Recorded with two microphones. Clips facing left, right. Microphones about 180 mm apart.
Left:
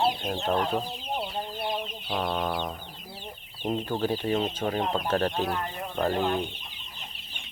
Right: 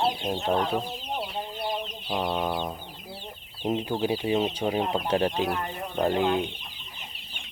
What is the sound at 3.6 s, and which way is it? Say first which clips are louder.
Speech: right 1 dB; 5° right (ahead or behind).